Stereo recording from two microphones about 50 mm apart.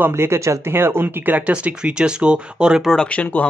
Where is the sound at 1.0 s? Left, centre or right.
Right.